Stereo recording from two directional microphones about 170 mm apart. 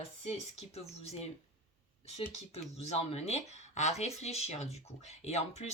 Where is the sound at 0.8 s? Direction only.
40° left (ahead or behind).